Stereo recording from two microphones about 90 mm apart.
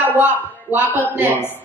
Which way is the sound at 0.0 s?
20° right (ahead or behind).